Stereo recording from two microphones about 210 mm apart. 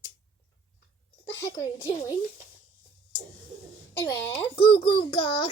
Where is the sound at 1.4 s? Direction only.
15° left (ahead or behind).